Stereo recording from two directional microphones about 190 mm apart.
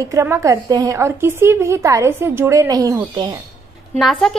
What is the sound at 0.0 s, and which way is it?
A woman's voice, 15° right (ahead or behind).